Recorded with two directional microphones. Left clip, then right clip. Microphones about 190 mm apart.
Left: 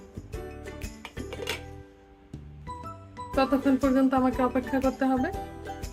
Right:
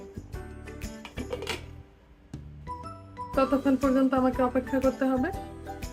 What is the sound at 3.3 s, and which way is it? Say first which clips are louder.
Speech: even; 15° left (ahead or behind).